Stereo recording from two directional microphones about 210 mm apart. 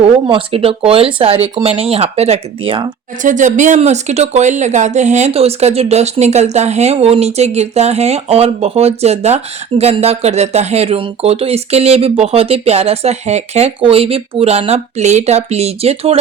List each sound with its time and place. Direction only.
0.0 s speech: 25° right (ahead or behind)
3.2 s speech: 35° right (ahead or behind)